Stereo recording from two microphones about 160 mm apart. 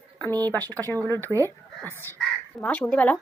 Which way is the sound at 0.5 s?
10° left (ahead or behind).